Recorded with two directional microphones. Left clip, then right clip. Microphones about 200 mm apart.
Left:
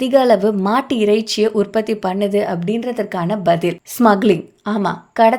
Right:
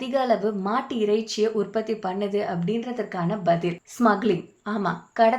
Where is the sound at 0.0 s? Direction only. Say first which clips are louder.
Left 10 dB; 45° left (ahead or behind).